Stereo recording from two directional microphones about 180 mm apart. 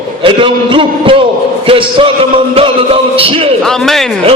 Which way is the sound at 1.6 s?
30° right (ahead or behind).